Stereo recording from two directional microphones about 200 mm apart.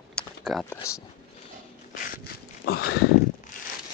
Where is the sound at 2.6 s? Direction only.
50° left (ahead or behind).